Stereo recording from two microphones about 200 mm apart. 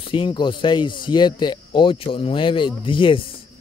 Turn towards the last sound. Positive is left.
turn(degrees=25)  # may be behind; listen again after turning